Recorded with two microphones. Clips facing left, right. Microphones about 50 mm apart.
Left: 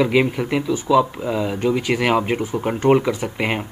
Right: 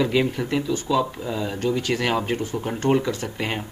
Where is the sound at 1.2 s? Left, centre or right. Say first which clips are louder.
Left 5 dB; left.